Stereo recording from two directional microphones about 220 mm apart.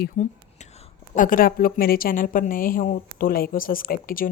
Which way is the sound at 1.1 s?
40° left (ahead or behind).